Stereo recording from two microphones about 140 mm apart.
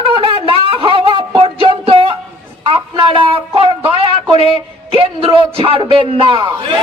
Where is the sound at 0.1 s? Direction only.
40° right (ahead or behind).